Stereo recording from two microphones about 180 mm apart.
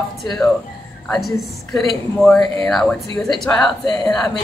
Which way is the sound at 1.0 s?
Centre (ahead or behind).